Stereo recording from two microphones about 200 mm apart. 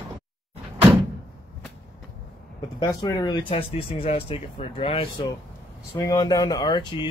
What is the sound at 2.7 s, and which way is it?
Speech, 20° left (ahead or behind).